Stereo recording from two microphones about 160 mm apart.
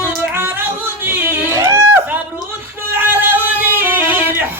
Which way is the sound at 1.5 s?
20° right (ahead or behind).